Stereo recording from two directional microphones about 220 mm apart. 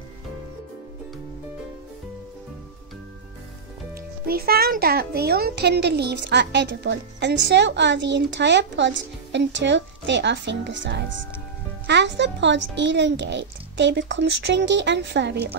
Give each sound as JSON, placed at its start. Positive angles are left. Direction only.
{"t": 4.3, "sound": "a child's voice", "side_deg": -45}